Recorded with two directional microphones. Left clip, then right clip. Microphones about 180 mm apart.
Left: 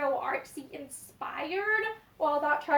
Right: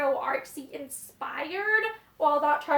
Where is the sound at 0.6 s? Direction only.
20° right (ahead or behind).